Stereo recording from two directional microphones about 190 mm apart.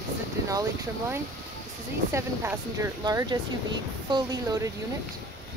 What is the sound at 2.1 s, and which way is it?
Speech, 15° right (ahead or behind).